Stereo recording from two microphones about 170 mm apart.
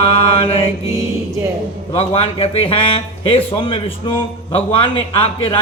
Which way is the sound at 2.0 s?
35° left (ahead or behind).